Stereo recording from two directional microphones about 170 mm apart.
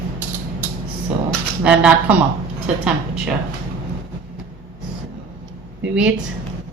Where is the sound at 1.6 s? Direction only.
10° right (ahead or behind).